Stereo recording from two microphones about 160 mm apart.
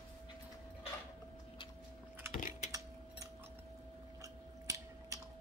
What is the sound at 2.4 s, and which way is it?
Typing, 55° left (ahead or behind).